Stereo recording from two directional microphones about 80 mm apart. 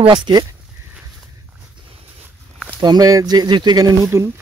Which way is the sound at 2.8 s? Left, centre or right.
Right.